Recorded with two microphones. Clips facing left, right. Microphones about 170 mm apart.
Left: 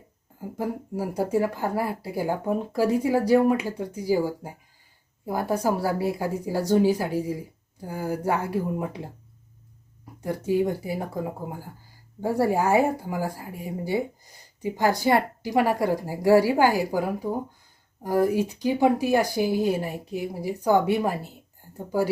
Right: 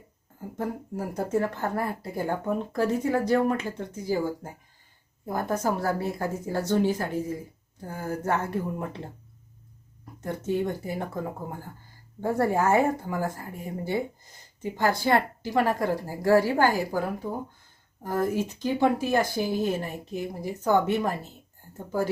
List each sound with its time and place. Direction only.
0.5 s speech: 10° left (ahead or behind)
10.2 s speech: 10° left (ahead or behind)
12.4 s speech: 10° left (ahead or behind)